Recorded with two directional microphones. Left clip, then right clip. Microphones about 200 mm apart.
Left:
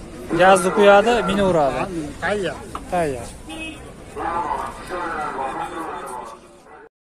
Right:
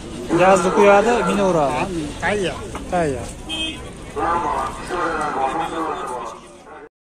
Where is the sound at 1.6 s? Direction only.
55° left (ahead or behind).